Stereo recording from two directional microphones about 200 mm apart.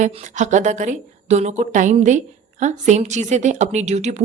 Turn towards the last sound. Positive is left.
turn(degrees=-35)  # may be behind; listen again after turning